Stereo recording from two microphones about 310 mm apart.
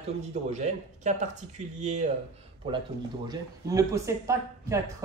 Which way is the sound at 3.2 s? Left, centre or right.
Centre.